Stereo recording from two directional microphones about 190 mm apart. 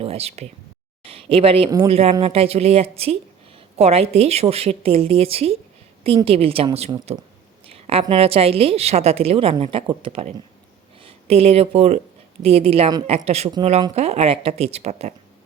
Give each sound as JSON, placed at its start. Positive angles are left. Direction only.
{"t": 0.0, "sound": "a woman's voice", "side_deg": -30}
{"t": 7.7, "sound": "a sound", "side_deg": -30}
{"t": 8.0, "sound": "a woman's voice", "side_deg": -30}